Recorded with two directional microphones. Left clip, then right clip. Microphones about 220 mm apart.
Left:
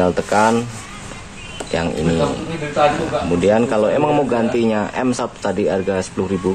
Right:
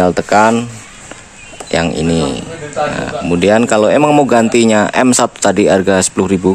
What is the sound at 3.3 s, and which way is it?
Speech, 55° right (ahead or behind).